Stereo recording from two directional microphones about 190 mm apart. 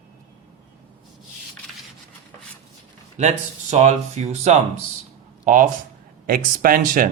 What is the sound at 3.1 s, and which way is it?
Speech, 40° right (ahead or behind).